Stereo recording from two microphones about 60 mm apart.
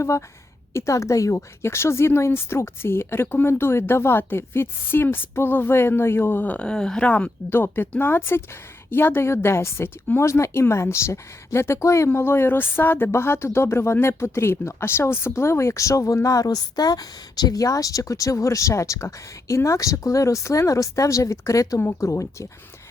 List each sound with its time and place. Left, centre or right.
0.7 s speech: left
6.4 s speech: left
6.7 s speech: centre
7.5 s speech: left
17.5 s speech: left
21.8 s speech: left